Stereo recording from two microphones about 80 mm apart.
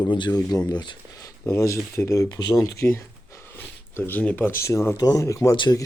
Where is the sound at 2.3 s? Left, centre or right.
Left.